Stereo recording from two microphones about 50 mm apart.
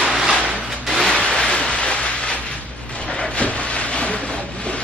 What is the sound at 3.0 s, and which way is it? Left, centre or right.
Train, centre.